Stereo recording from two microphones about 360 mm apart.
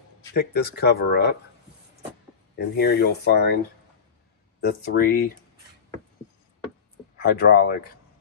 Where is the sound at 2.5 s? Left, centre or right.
Left.